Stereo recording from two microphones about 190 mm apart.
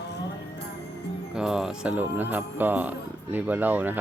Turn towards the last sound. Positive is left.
turn(degrees=-10)  # may be behind; listen again after turning